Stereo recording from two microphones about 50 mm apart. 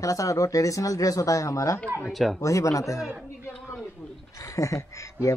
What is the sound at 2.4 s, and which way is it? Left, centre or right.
Speech, left.